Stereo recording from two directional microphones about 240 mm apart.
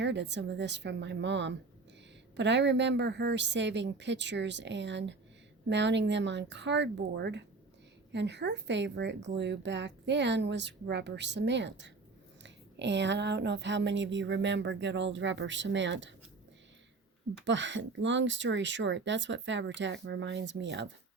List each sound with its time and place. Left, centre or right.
0.0 s a woman's voice: right
17.4 s a woman's voice: right